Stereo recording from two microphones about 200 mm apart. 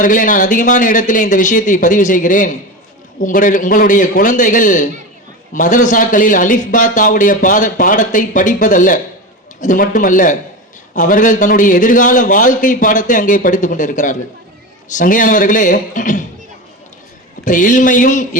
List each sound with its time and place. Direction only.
0.0 s a man's voice: 40° left (ahead or behind)
17.4 s a man's voice: 40° left (ahead or behind)